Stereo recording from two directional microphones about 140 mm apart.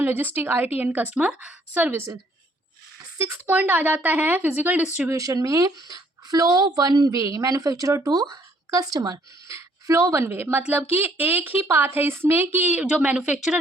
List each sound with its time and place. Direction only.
0.0 s a woman's voice: 15° right (ahead or behind)
3.2 s speech: 15° right (ahead or behind)